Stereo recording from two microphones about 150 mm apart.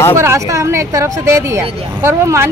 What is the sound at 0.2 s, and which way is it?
Speech, 20° right (ahead or behind).